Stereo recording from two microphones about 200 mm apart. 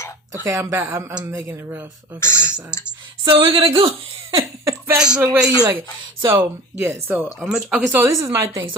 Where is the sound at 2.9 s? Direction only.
25° right (ahead or behind).